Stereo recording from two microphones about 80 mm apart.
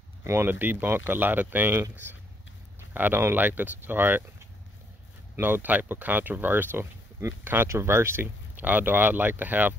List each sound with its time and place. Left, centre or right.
0.2 s speech: right
0.5 s speech: right
5.3 s speech: right
7.2 s speech: right